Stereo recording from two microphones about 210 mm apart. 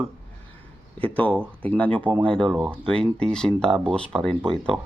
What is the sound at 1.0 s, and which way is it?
Speech, 5° left (ahead or behind).